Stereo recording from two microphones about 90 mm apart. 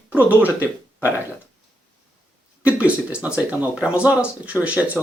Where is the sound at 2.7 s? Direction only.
15° right (ahead or behind).